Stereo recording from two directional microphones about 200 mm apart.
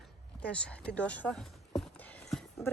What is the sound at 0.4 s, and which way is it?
Speech, 5° left (ahead or behind).